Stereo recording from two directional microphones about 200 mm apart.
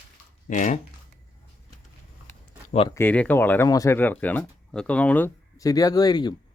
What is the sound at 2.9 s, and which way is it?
Speech, 10° left (ahead or behind).